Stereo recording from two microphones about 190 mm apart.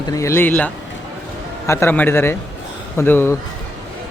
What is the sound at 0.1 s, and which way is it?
Speech, 15° left (ahead or behind).